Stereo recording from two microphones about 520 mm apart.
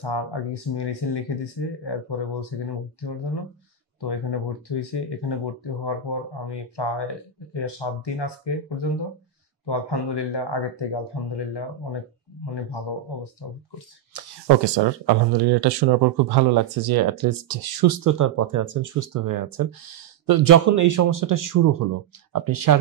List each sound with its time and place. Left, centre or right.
0.0 s speech: left
4.0 s speech: left
14.1 s speech: right